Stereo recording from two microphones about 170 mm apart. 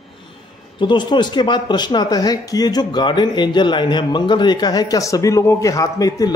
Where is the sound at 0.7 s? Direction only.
25° left (ahead or behind).